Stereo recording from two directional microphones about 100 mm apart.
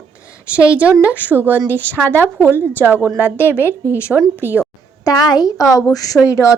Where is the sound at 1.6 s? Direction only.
20° left (ahead or behind).